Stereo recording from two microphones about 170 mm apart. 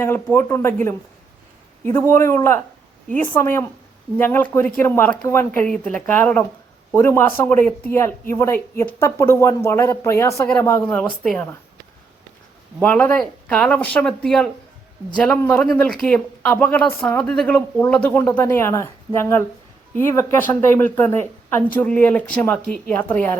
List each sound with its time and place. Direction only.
0.0 s speech: 15° left (ahead or behind)
1.8 s speech: 15° left (ahead or behind)
12.8 s speech: 10° left (ahead or behind)